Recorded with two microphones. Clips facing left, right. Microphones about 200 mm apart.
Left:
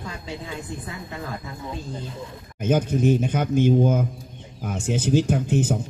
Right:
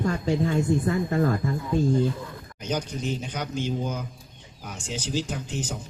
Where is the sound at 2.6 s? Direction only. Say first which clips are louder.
Left 9 dB; 55° left (ahead or behind).